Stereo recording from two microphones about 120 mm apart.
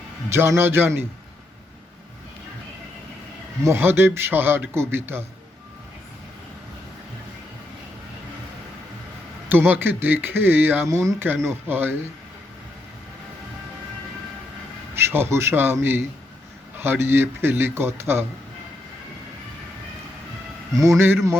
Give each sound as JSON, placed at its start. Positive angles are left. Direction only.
{"t": 0.3, "sound": "speech", "side_deg": -20}
{"t": 3.6, "sound": "speech", "side_deg": -20}
{"t": 9.5, "sound": "speech", "side_deg": -15}
{"t": 14.9, "sound": "speech", "side_deg": -20}
{"t": 20.7, "sound": "speech", "side_deg": -25}